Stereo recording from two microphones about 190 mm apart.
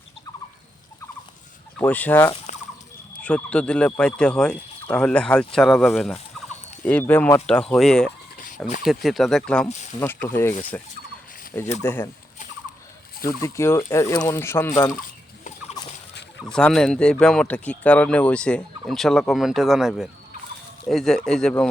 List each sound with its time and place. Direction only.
1.8 s speech: 10° left (ahead or behind)
13.4 s speech: 15° left (ahead or behind)
15.8 s turkey: 20° left (ahead or behind)
16.5 s speech: 5° left (ahead or behind)